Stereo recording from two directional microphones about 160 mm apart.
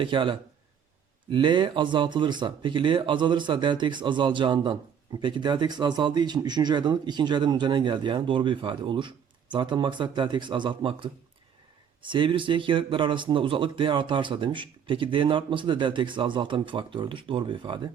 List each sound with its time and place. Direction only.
0.0 s a man's voice: 30° right (ahead or behind)